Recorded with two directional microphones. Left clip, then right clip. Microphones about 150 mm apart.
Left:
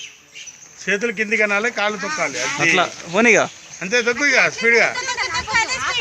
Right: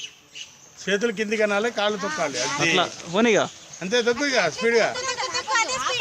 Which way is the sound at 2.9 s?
Centre (ahead or behind).